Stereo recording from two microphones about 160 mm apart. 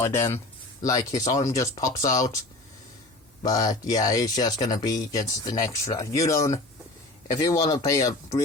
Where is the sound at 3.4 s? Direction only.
25° left (ahead or behind).